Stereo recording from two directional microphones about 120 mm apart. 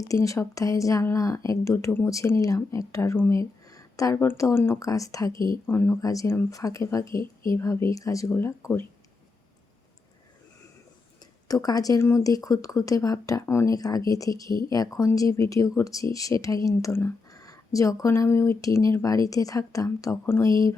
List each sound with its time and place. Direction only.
0.0 s speech: 25° left (ahead or behind)
3.7 s a sound: 30° left (ahead or behind)
4.2 s speech: 20° left (ahead or behind)
11.4 s speech: 30° left (ahead or behind)